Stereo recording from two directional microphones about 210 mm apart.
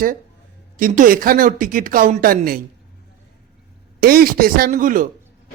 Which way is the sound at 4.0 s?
45° right (ahead or behind).